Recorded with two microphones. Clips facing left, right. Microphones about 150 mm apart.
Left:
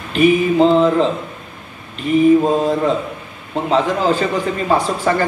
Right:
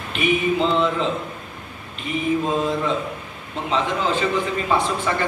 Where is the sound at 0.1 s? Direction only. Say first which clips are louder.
Left 7 dB; 40° left (ahead or behind).